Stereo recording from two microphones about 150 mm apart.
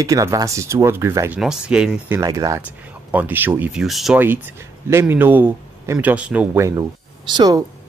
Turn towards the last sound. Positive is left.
turn(degrees=-30)  # may be behind; listen again after turning